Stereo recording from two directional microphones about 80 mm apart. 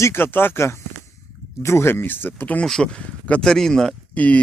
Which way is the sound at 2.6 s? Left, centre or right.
Centre.